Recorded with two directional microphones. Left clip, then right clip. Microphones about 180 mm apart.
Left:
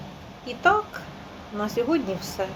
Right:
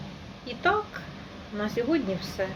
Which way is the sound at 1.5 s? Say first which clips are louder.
Left 3 dB; 5° right (ahead or behind).